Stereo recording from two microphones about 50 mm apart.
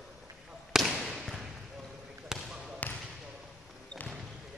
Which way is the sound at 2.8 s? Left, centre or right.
Left.